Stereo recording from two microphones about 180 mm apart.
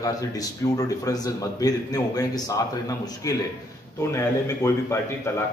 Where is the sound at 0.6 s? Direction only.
15° left (ahead or behind).